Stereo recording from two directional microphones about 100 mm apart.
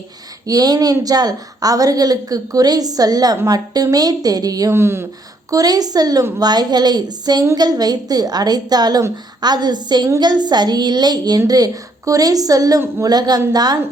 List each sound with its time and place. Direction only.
0.4 s a woman's voice: 40° right (ahead or behind)
4.7 s speech: 25° right (ahead or behind)
5.5 s a woman's voice: 40° right (ahead or behind)